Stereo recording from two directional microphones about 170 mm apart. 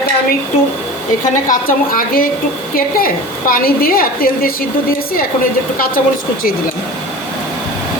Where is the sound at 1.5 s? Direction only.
55° left (ahead or behind).